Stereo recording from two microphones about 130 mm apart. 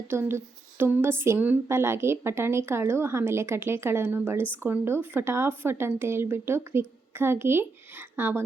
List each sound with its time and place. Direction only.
0.1 s a woman's voice: 20° right (ahead or behind)